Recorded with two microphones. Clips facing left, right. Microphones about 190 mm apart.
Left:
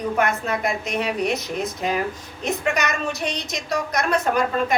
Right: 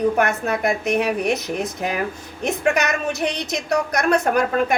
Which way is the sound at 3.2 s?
60° right (ahead or behind).